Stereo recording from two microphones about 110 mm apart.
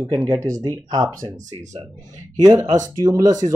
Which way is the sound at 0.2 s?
35° right (ahead or behind).